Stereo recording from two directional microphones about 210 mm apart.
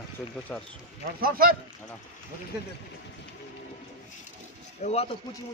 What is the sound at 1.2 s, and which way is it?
Speech, 45° right (ahead or behind).